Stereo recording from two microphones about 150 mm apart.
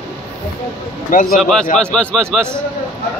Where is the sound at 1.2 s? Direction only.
Centre (ahead or behind).